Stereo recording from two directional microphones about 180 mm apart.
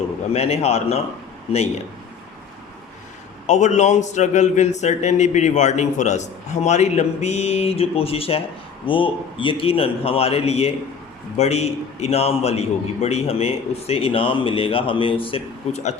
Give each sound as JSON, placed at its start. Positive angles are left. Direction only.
{"t": 0.3, "sound": "a man's voice", "side_deg": 35}
{"t": 3.4, "sound": "a man's voice", "side_deg": 40}